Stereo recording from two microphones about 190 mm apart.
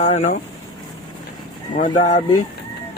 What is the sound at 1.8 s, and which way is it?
Speech, 40° left (ahead or behind).